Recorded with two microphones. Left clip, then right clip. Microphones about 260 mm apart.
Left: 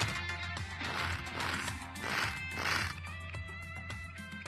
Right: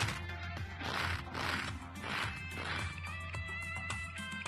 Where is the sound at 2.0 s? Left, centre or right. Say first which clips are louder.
Left 4 dB; centre.